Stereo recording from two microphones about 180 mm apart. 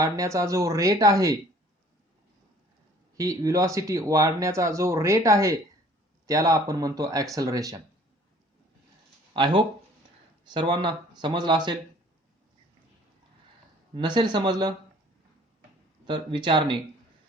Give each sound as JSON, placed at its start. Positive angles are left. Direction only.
{"t": 0.0, "sound": "speech", "side_deg": -20}
{"t": 3.2, "sound": "speech", "side_deg": -20}
{"t": 9.3, "sound": "speech", "side_deg": -25}
{"t": 13.9, "sound": "speech", "side_deg": -25}
{"t": 16.0, "sound": "speech", "side_deg": -25}